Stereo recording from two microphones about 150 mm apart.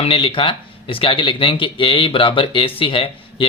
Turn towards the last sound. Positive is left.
turn(degrees=35)  # may be behind; listen again after turning